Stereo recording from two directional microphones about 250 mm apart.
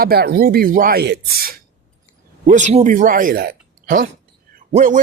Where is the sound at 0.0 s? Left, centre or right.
Right.